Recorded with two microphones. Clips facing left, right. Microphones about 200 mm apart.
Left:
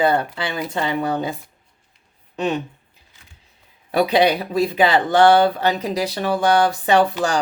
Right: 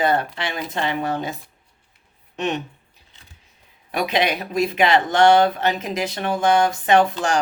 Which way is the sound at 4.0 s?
35° left (ahead or behind).